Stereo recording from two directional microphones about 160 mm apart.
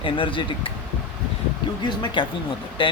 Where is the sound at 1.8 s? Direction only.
30° left (ahead or behind).